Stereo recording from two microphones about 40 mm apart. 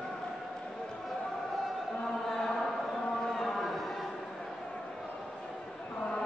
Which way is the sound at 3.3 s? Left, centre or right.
Centre.